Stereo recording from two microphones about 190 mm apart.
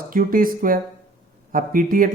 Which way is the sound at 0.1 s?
50° right (ahead or behind).